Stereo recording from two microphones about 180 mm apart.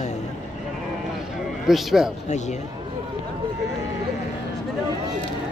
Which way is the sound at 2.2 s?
40° left (ahead or behind).